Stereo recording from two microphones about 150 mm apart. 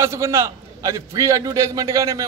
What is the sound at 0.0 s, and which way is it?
A man's voice, 20° right (ahead or behind).